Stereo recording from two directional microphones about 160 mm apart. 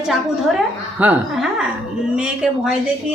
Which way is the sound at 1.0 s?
10° right (ahead or behind).